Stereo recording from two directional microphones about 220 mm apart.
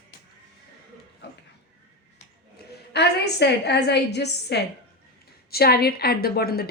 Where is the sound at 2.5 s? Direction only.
50° left (ahead or behind).